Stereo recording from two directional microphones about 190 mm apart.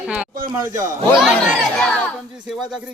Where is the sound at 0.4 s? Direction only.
25° right (ahead or behind).